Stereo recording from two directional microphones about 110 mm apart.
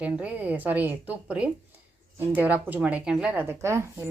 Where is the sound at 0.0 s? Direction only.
10° right (ahead or behind).